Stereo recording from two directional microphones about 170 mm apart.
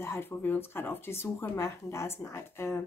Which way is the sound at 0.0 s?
15° left (ahead or behind).